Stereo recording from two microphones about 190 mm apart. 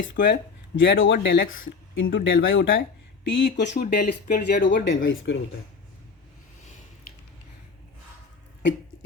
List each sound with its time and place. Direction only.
0.0 s speech: 70° left (ahead or behind)
0.8 s speech: 85° left
2.0 s speech: 70° left (ahead or behind); by 2.7 s 90° left
3.2 s speech: 70° left (ahead or behind)
3.8 s speech: 55° left (ahead or behind); by 5.4 s 75° left (ahead or behind)